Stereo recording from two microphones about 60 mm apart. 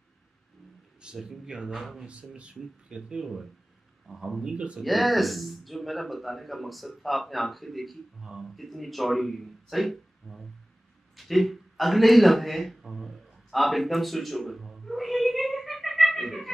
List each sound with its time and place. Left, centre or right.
1.0 s speech: centre
1.8 s speech: centre
2.0 s speech: centre
4.8 s speech: centre
11.1 s a sound: centre